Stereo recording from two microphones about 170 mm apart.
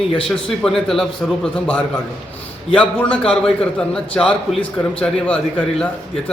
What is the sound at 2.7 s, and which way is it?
A man's voice, 5° left (ahead or behind).